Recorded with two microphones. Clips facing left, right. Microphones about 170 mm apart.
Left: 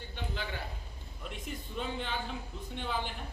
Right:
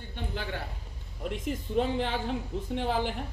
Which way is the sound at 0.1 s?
55° right (ahead or behind).